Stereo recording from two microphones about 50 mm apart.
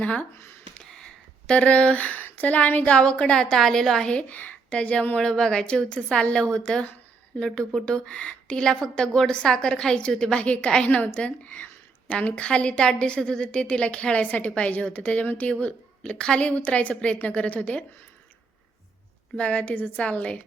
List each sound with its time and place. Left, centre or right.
0.0 s a woman's voice: left
0.3 s speech: left
0.9 s a sound: centre
2.2 s speech: left
2.9 s a woman's voice: left
4.1 s a woman's voice: left
19.4 s a woman's voice: left